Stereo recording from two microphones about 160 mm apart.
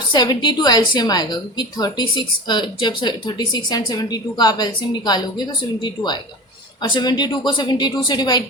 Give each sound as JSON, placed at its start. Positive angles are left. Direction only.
{"t": 0.1, "sound": "a woman's voice", "side_deg": 25}